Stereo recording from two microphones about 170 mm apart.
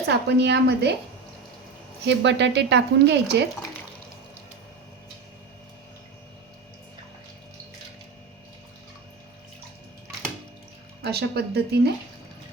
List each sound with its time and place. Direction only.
0.1 s a woman's voice: 80° right
2.0 s speech: 90° right
11.0 s speech: 70° right (ahead or behind)